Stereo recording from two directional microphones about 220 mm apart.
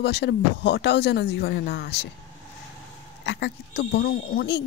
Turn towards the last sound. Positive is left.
turn(degrees=45)  # may be behind; listen again after turning